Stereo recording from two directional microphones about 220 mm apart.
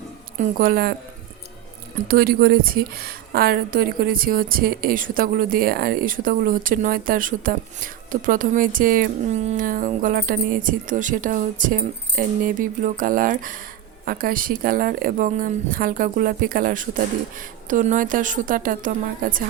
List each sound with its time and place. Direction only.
0.3 s a woman's voice: 35° right (ahead or behind)
2.0 s a woman's voice: 40° right (ahead or behind)